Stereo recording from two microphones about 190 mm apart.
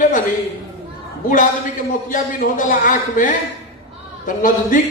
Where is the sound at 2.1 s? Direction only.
45° left (ahead or behind).